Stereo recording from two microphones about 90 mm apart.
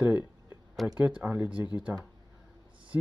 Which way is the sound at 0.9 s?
15° right (ahead or behind).